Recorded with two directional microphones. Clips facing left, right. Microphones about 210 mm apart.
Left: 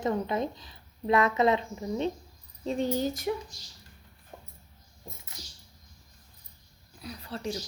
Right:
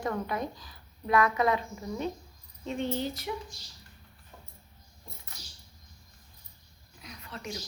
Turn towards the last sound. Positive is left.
turn(degrees=30)  # may be behind; listen again after turning